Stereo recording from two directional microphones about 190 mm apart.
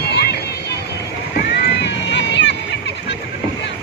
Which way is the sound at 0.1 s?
60° left (ahead or behind).